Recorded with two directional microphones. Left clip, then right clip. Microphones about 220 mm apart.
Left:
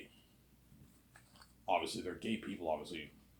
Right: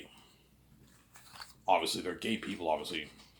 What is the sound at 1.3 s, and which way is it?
Speech, 25° right (ahead or behind).